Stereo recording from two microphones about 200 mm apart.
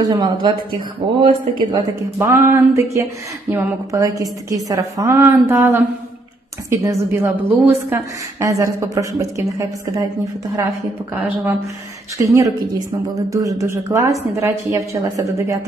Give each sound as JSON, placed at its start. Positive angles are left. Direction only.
{"t": 0.1, "sound": "speech", "side_deg": -20}
{"t": 2.1, "sound": "speech", "side_deg": -10}
{"t": 12.3, "sound": "speech", "side_deg": -15}